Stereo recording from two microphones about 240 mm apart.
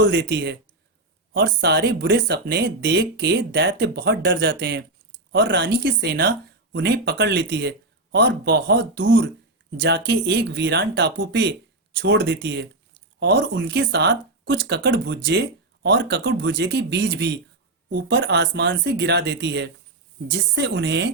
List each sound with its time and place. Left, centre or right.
0.1 s speech: right